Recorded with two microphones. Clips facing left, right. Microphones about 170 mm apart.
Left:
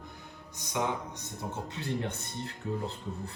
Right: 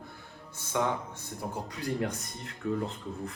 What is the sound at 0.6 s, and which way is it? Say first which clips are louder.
Speech: right 2 dB; 15° left (ahead or behind).